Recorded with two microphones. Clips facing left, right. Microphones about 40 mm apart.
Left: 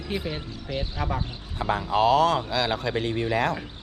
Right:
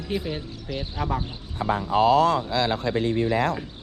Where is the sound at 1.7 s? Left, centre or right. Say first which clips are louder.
Right 1 dB; left.